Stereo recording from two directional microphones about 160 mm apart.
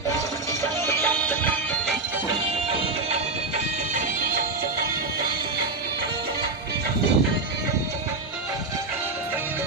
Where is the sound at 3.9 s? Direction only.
60° right (ahead or behind).